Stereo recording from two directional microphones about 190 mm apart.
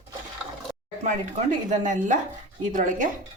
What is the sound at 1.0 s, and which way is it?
Speech, 40° right (ahead or behind).